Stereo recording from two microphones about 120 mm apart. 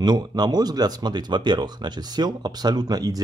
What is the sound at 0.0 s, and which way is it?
Speech, 35° right (ahead or behind).